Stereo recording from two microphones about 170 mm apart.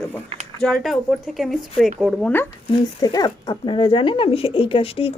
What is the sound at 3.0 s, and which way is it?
Speech, 25° left (ahead or behind).